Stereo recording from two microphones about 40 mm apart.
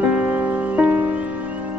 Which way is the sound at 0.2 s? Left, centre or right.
Right.